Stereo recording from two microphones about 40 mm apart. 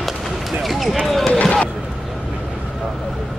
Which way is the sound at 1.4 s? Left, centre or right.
Left.